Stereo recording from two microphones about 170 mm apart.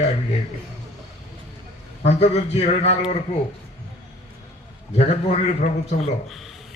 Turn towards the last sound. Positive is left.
turn(degrees=40)  # may be behind; listen again after turning